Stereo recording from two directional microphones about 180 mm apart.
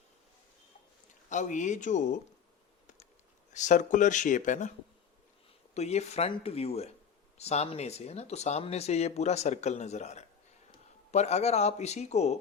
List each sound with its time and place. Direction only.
1.3 s speech: 45° left (ahead or behind)
3.5 s speech: 45° left (ahead or behind)
5.7 s speech: 35° left (ahead or behind)